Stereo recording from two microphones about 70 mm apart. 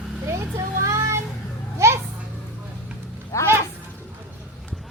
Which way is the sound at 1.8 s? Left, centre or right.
Right.